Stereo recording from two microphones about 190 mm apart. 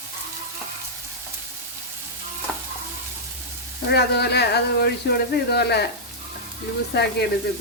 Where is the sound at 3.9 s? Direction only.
60° left (ahead or behind).